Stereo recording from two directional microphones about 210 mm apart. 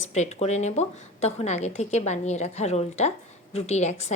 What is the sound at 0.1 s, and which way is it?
A woman's voice, 30° left (ahead or behind).